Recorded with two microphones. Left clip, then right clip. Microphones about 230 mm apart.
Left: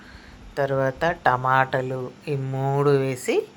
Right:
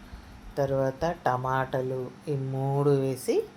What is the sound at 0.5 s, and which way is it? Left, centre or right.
A woman's voice, centre.